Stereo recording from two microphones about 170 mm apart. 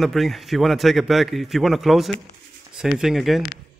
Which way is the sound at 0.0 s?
Centre (ahead or behind).